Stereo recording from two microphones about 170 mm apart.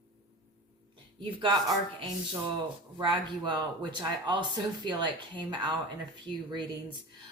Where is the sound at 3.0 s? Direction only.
25° right (ahead or behind).